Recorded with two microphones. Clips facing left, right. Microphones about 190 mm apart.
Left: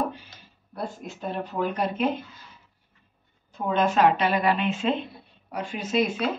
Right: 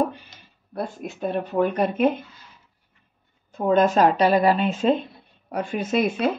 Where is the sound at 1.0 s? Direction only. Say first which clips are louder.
Right 5 dB; 60° right (ahead or behind).